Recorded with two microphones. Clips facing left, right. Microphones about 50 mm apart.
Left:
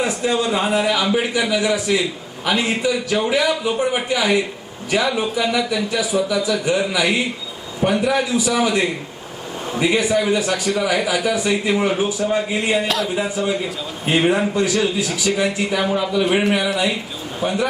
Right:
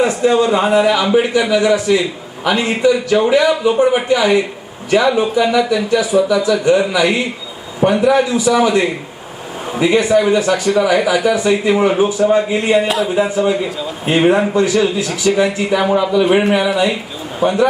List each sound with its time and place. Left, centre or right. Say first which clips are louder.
0.0 s a man's voice: right 7 dB; centre
12.9 s speech: right 4 dB; centre
13.1 s a man's voice: right 6 dB; centre